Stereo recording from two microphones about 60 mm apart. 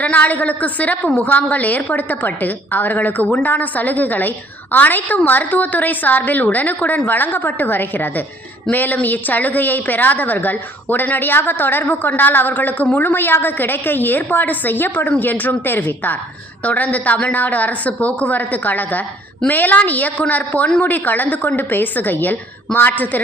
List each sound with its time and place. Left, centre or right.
0.0 s a woman's voice: left